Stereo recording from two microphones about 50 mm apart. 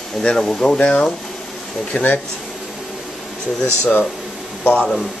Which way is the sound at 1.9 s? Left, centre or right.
Left.